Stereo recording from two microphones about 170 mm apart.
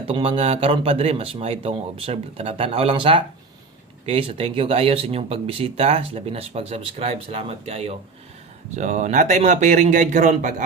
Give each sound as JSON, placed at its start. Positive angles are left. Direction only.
{"t": 0.1, "sound": "speech", "side_deg": -35}